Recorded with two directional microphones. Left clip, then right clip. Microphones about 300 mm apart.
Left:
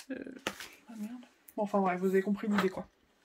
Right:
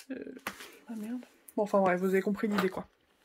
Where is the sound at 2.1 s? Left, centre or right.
Centre.